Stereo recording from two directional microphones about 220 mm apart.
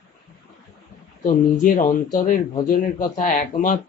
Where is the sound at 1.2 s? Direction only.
35° left (ahead or behind).